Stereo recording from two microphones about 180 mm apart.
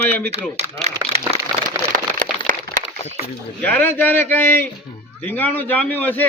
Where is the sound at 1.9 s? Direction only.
50° right (ahead or behind).